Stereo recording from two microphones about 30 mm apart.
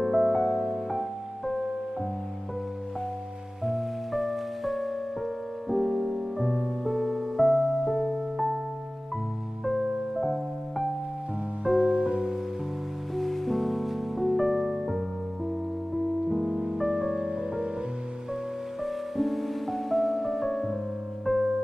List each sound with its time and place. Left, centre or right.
0.0 s music: centre
0.6 s music: centre
3.6 s music: centre
9.7 s music: centre
11.8 s music: right
13.1 s music: centre
16.4 s music: centre
17.1 s music: right
18.8 s music: centre
21.3 s music: centre